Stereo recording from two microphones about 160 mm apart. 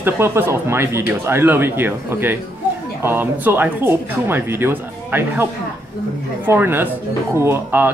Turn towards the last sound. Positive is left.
turn(degrees=-15)  # may be behind; listen again after turning